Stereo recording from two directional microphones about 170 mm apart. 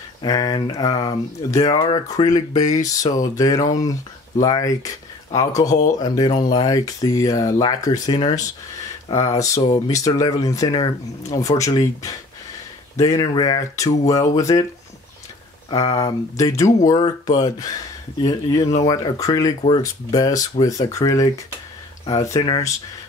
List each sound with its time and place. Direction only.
0.2 s speech: 20° left (ahead or behind)
15.7 s speech: 20° left (ahead or behind)